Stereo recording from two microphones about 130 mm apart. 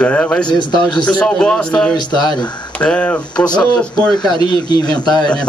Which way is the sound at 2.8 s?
10° left (ahead or behind).